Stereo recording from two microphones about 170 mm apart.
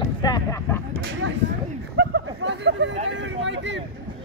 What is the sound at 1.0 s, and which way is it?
Speech, 90° right.